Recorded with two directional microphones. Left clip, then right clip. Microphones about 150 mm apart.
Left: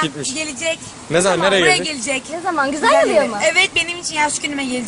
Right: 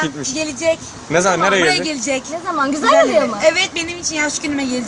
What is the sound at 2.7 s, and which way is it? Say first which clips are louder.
A woman's voice: right 2 dB; 10° left (ahead or behind).